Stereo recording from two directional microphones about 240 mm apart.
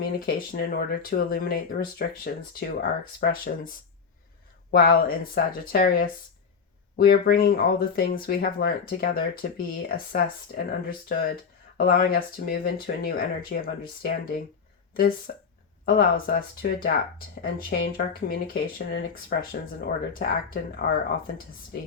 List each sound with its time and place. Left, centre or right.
0.0 s speech: left
15.3 s speech: left
21.7 s speech: left